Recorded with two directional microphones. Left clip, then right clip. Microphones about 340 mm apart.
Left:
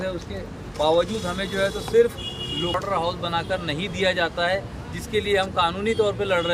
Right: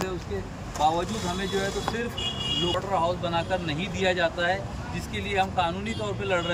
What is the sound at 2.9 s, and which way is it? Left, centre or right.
Speech, centre.